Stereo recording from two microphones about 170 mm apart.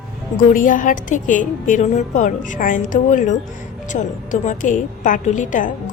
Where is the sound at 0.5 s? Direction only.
55° left (ahead or behind).